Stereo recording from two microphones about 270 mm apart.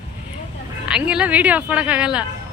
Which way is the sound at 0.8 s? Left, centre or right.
Centre.